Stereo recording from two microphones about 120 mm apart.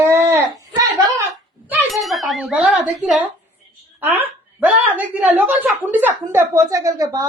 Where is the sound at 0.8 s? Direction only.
30° right (ahead or behind).